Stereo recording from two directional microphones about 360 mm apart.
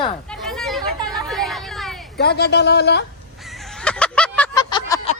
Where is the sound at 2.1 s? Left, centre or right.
Left.